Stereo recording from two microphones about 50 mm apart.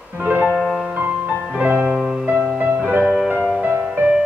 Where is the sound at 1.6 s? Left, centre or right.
Right.